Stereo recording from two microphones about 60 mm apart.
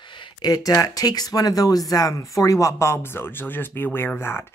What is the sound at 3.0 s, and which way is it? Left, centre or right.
Speech, left.